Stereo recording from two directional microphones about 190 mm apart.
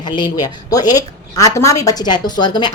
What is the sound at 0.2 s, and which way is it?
A woman's voice, 20° left (ahead or behind).